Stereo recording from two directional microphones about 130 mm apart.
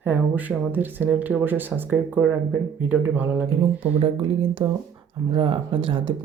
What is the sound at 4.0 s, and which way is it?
Speech, 40° right (ahead or behind).